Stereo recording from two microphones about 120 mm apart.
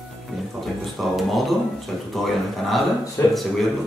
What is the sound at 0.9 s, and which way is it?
Speech, centre (ahead or behind).